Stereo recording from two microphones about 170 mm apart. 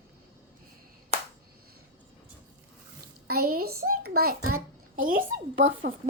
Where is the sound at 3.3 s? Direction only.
60° right (ahead or behind).